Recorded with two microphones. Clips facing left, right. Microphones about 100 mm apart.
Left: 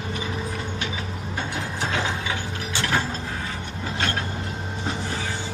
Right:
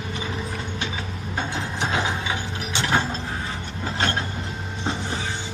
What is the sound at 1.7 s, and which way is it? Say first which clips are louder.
Ratchet: right 2 dB; 20° right (ahead or behind).